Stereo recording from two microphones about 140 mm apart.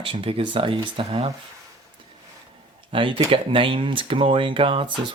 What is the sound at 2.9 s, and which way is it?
Speech, 40° right (ahead or behind).